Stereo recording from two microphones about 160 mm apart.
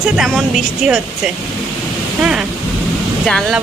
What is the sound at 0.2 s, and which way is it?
Speech, centre (ahead or behind).